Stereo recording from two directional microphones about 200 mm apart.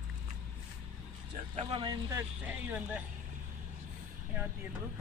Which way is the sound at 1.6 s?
25° right (ahead or behind).